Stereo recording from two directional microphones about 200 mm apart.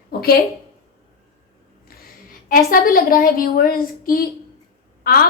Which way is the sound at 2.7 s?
45° left (ahead or behind).